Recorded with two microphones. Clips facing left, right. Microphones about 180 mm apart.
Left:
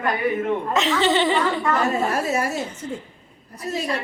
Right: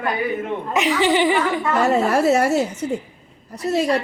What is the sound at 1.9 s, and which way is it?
A woman's voice, 75° right (ahead or behind).